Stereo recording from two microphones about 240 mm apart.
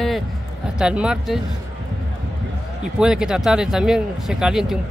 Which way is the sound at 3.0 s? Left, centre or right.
Centre.